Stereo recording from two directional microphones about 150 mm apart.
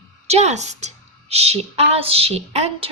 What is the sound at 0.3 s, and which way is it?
A woman's voice, 45° right (ahead or behind).